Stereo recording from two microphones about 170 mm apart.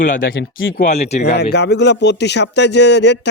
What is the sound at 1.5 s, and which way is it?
Speech, 85° left.